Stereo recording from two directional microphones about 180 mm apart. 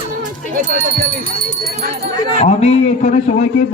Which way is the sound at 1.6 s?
55° right (ahead or behind).